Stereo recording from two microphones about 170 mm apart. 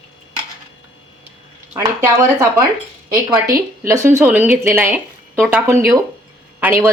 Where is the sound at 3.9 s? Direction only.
15° right (ahead or behind).